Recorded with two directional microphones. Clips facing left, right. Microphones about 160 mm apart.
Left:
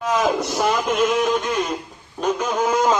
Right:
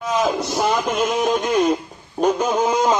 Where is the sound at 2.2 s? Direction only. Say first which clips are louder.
Right 3 dB; 25° right (ahead or behind).